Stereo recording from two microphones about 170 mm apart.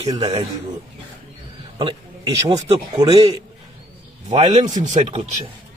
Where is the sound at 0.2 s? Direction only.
35° right (ahead or behind).